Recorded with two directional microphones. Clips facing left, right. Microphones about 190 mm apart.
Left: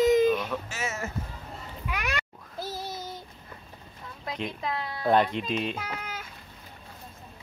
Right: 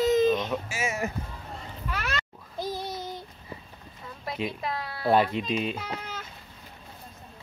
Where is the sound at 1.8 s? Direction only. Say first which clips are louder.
Even; 15° left (ahead or behind).